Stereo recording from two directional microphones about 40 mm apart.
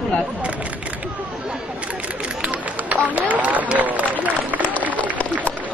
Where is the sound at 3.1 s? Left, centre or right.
Right.